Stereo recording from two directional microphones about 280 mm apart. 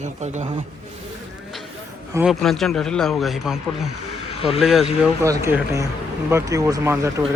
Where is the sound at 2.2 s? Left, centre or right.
Centre.